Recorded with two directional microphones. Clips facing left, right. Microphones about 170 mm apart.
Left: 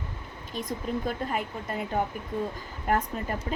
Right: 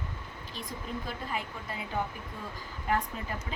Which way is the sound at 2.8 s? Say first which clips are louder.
Left 4 dB; 50° left (ahead or behind).